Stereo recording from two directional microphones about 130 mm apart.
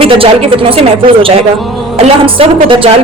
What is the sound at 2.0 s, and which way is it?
Speech, 45° right (ahead or behind).